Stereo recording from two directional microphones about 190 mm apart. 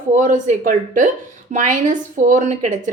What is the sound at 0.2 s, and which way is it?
A woman's voice, 40° right (ahead or behind).